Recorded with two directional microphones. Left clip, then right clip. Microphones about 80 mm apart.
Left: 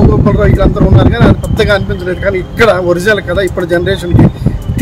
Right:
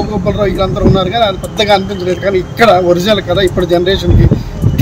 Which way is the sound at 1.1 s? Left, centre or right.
Left.